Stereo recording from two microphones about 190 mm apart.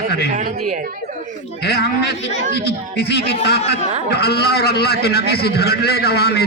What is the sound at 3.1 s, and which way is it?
A man's voice, 60° left (ahead or behind).